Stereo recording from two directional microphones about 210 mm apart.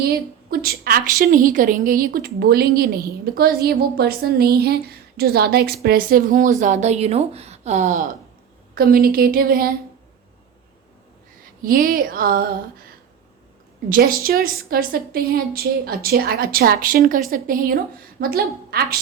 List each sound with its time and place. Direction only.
0.6 s a woman's voice: 45° right (ahead or behind)
11.6 s a woman's voice: 40° right (ahead or behind)
13.9 s a woman's voice: 45° right (ahead or behind)